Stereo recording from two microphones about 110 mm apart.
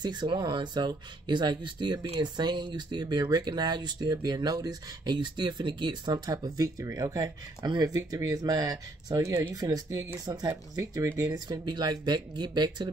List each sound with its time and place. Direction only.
0.0 s speech: 40° right (ahead or behind)